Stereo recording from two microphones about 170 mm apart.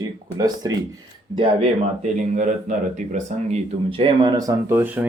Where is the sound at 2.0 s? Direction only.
45° right (ahead or behind).